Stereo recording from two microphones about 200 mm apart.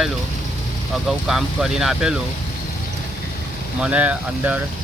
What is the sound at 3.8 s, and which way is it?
Speech, 5° right (ahead or behind).